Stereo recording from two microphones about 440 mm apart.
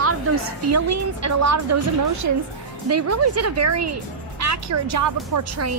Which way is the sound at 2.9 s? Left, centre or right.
Right.